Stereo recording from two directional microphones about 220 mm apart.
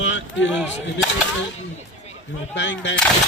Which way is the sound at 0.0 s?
60° left (ahead or behind).